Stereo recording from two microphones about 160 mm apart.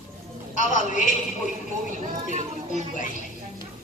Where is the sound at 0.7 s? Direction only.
55° left (ahead or behind).